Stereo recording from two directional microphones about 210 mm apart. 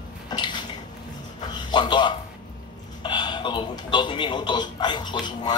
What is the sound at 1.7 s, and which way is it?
A man's voice, 20° left (ahead or behind).